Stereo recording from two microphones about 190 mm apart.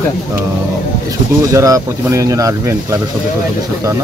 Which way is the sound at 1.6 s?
15° right (ahead or behind).